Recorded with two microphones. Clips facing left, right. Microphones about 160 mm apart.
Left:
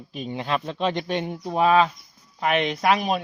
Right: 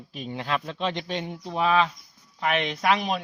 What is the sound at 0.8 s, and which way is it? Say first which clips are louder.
Speech: left 4 dB; 45° left (ahead or behind).